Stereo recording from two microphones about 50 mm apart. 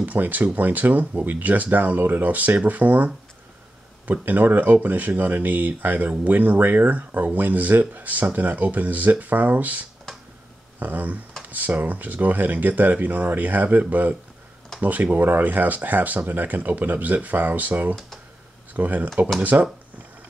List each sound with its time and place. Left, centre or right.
0.0 s speech: right
4.2 s speech: right